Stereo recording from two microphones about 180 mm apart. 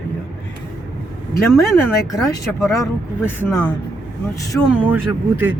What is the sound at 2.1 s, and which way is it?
Speech, 20° left (ahead or behind).